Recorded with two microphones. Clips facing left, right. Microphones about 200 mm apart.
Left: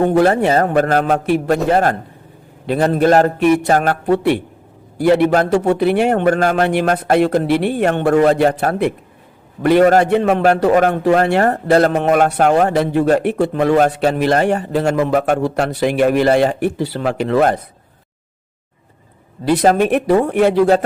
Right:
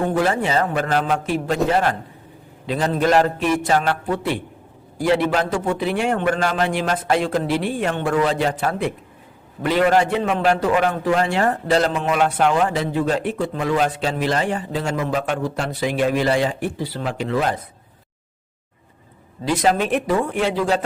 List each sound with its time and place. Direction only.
0.3 s a man's voice: 55° left (ahead or behind)
1.7 s a man's voice: 45° left (ahead or behind)
2.6 s a man's voice: 60° left (ahead or behind)
3.1 s a man's voice: 45° left (ahead or behind)
3.3 s a man's voice: 60° left (ahead or behind)
3.7 s a man's voice: 45° left (ahead or behind)
4.0 s a man's voice: 65° left (ahead or behind)
6.3 s a man's voice: 50° left (ahead or behind)
10.9 s a man's voice: 60° left (ahead or behind)
19.6 s a man's voice: 50° left (ahead or behind)